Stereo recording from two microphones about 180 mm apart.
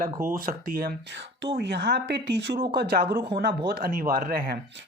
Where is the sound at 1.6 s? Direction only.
70° right (ahead or behind); by 4.6 s 50° right (ahead or behind).